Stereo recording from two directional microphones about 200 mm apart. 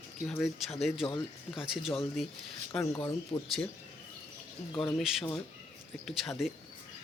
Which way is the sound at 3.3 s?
25° left (ahead or behind).